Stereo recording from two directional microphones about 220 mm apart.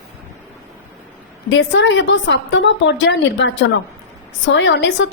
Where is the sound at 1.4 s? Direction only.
55° left (ahead or behind).